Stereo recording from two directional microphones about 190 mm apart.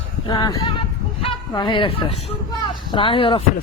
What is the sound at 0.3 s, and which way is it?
Speech, 20° left (ahead or behind).